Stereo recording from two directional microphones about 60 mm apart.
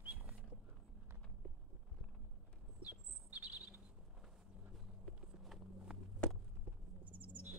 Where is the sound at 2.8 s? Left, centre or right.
Right.